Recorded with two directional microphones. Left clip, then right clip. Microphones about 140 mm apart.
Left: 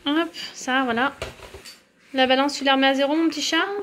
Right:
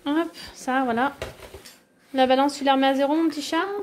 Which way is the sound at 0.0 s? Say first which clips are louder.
Left 2 dB; 5° right (ahead or behind).